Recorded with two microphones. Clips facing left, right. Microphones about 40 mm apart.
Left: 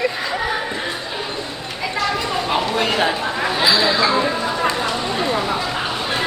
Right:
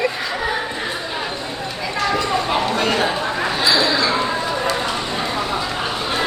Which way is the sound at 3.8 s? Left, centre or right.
Centre.